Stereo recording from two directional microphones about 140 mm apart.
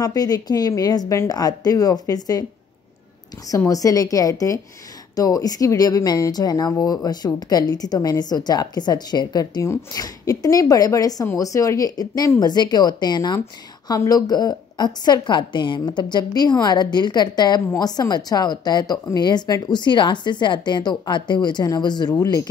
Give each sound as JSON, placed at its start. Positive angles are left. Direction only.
{"t": 0.0, "sound": "speech", "side_deg": 25}
{"t": 3.4, "sound": "a woman's voice", "side_deg": 25}